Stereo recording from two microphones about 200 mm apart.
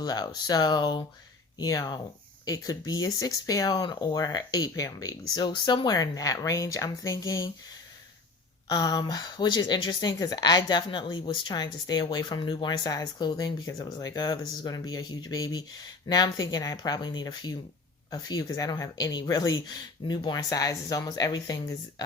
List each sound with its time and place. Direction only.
0.0 s speech: 20° left (ahead or behind)
8.7 s speech: 20° left (ahead or behind)